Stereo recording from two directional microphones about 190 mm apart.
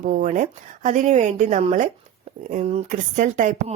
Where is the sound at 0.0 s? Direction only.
45° right (ahead or behind).